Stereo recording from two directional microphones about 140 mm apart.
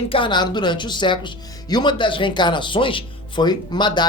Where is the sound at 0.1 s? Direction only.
35° left (ahead or behind).